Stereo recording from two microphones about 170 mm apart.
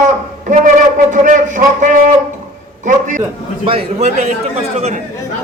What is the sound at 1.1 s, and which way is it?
A man's voice, 45° right (ahead or behind).